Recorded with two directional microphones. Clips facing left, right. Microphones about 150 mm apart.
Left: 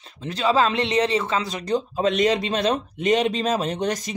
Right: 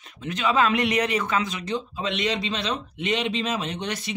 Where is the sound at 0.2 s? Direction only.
35° left (ahead or behind).